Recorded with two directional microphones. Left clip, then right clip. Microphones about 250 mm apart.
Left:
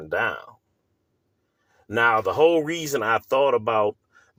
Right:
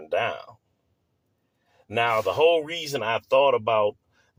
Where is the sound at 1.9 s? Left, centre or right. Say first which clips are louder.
Left 3 dB; left.